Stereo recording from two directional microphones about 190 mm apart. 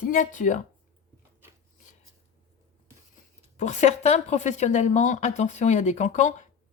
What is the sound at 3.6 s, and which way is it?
Speech, 40° left (ahead or behind).